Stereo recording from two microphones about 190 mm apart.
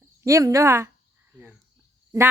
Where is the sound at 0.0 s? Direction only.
15° right (ahead or behind).